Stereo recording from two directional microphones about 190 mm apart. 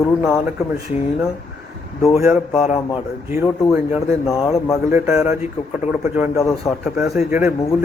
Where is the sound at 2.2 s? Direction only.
5° right (ahead or behind).